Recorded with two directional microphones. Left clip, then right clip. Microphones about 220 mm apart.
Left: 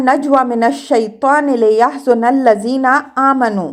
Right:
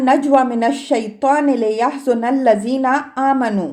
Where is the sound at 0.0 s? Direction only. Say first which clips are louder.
Left 1 dB; 20° left (ahead or behind).